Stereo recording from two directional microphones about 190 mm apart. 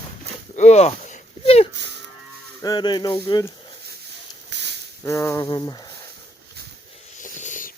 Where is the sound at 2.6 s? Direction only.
20° left (ahead or behind).